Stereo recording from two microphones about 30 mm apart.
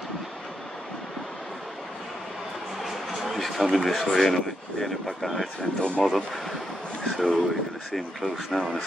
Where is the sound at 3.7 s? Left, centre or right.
Centre.